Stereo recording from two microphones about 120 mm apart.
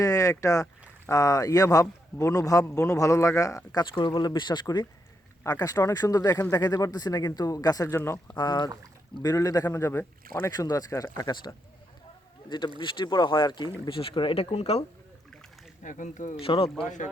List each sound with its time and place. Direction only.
0.0 s speech: 30° left (ahead or behind)
5.4 s speech: 25° left (ahead or behind)
8.4 s speech: 35° left (ahead or behind); by 10.5 s 20° left (ahead or behind)
10.5 s speech: 30° left (ahead or behind); by 14.8 s 60° left (ahead or behind)
15.3 s rowboat: 5° left (ahead or behind)
15.8 s speech: 90° left
16.4 s speech: 50° left (ahead or behind)